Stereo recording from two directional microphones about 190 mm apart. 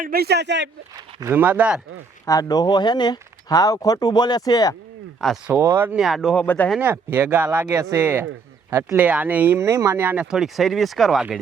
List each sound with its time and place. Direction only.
0.0 s speech: 55° right (ahead or behind)
0.9 s speech: 15° right (ahead or behind)
2.2 s speech: 20° left (ahead or behind)
5.2 s speech: centre (ahead or behind)
5.5 s speech: 15° right (ahead or behind); by 6.7 s 10° left (ahead or behind)
6.7 s speech: 10° right (ahead or behind)